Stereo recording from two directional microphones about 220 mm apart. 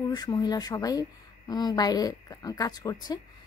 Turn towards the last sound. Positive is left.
turn(degrees=20)  # may be behind; listen again after turning